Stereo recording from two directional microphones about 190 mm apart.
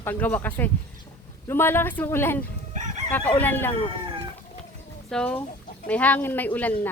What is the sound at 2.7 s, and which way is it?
Crowing, 35° right (ahead or behind).